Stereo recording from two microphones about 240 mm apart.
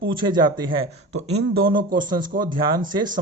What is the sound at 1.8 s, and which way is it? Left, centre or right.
Speech, right.